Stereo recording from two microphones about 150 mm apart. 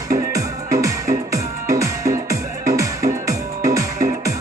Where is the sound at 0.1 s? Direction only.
20° right (ahead or behind).